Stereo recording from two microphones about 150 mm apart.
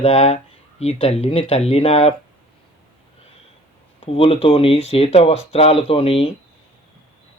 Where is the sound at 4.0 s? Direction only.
40° left (ahead or behind).